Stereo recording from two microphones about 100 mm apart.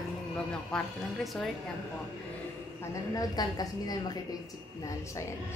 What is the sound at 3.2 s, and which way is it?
Speech, 40° left (ahead or behind).